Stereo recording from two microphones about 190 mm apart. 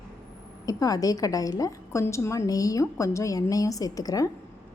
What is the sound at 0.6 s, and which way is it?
A woman's voice, 20° left (ahead or behind).